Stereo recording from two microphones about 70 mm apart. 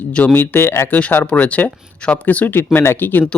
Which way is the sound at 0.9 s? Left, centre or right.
Left.